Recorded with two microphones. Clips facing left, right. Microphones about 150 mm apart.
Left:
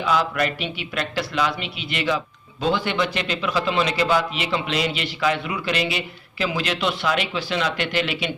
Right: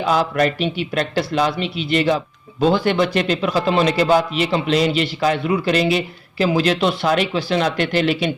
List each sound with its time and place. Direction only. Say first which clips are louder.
0.0 s a man's voice: right 4 dB; 40° right (ahead or behind)